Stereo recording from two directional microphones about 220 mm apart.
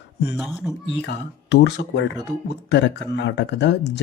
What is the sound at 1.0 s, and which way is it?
Speech, 50° left (ahead or behind).